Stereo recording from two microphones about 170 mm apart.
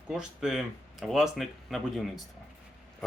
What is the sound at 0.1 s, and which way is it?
Speech, 5° right (ahead or behind).